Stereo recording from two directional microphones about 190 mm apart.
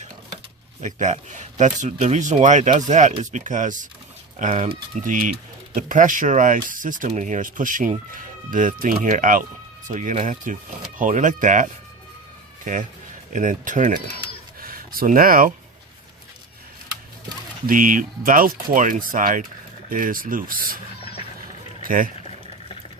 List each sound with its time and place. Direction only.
0.8 s speech: 40° right (ahead or behind)
13.3 s speech: 45° right (ahead or behind)
17.7 s speech: 45° right (ahead or behind)
21.8 s speech: 45° right (ahead or behind)